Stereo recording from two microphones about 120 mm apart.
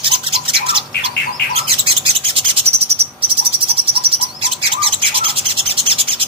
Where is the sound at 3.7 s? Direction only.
50° right (ahead or behind).